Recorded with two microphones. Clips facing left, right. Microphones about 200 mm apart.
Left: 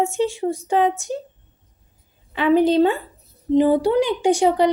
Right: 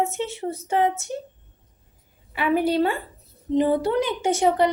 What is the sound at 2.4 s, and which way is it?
A woman's voice, 20° left (ahead or behind).